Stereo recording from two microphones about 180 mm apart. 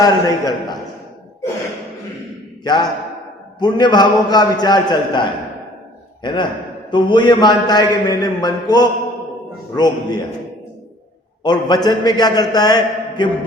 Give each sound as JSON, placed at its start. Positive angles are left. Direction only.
{"t": 0.0, "sound": "a man's voice", "side_deg": 20}
{"t": 2.6, "sound": "a man's voice", "side_deg": 25}
{"t": 11.4, "sound": "a man's voice", "side_deg": 25}